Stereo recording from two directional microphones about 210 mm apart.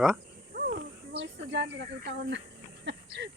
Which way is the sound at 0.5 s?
50° right (ahead or behind).